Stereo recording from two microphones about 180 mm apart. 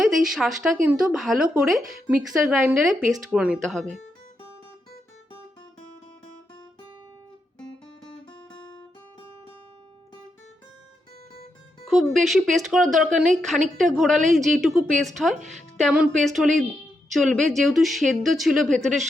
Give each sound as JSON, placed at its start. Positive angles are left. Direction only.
{"t": 0.0, "sound": "speech", "side_deg": 0}
{"t": 11.9, "sound": "speech", "side_deg": 0}